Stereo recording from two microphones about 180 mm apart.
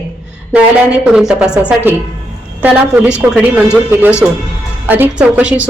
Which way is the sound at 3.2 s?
10° right (ahead or behind).